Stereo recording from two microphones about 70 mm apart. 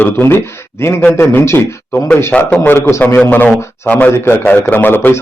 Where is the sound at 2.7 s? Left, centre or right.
Left.